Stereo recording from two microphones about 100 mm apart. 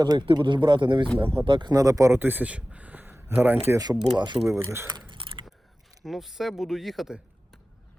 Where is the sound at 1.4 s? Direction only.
50° right (ahead or behind).